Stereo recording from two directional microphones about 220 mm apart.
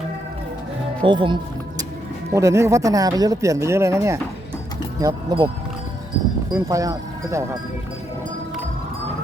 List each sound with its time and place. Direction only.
1.0 s speech: 20° right (ahead or behind)
6.5 s speech: 15° right (ahead or behind)